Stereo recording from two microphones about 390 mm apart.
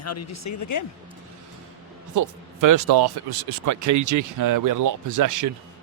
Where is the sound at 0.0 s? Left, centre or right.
Left.